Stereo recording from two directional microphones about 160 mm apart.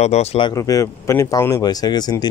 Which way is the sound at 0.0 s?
40° left (ahead or behind).